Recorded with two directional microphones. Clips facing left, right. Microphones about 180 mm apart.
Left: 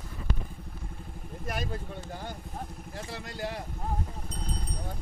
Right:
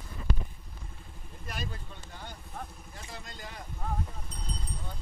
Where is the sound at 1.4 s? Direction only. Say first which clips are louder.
Left 6 dB; 45° left (ahead or behind).